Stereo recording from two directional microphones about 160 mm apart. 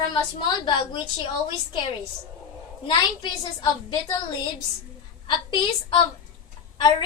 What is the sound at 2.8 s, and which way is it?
A woman's voice, 30° left (ahead or behind).